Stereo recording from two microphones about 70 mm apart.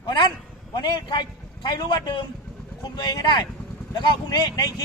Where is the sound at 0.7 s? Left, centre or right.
Left.